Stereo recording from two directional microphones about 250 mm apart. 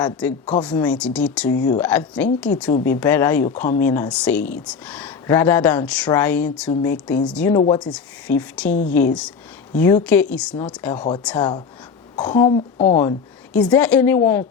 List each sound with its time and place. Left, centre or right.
0.0 s speech: centre
11.3 s a woman's voice: centre
13.0 s speech: centre